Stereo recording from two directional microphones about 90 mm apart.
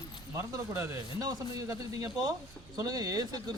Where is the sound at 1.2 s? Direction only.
45° right (ahead or behind).